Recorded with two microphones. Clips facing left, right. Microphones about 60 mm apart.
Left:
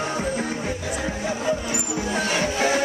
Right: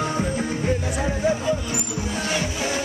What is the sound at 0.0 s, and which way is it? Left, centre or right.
Music, centre.